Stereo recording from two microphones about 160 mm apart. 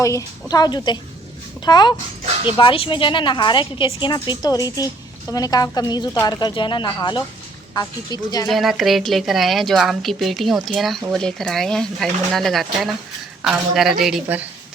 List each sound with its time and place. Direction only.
0.0 s a woman's voice: 20° left (ahead or behind)
8.4 s a woman's voice: centre (ahead or behind)